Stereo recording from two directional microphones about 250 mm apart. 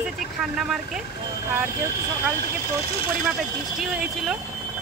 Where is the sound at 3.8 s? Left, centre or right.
Centre.